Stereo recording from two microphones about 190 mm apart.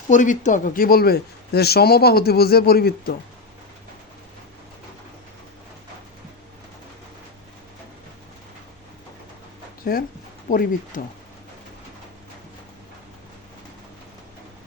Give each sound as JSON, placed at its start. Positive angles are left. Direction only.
{"t": 0.1, "sound": "a man's voice", "side_deg": 40}
{"t": 9.8, "sound": "speech", "side_deg": 50}